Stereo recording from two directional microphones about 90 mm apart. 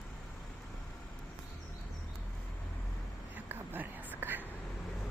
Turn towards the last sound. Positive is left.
turn(degrees=-20)  # may be behind; listen again after turning